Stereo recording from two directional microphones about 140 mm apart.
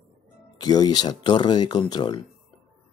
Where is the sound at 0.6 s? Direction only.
30° left (ahead or behind).